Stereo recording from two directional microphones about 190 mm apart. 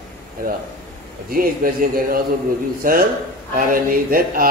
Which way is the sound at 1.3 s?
50° right (ahead or behind).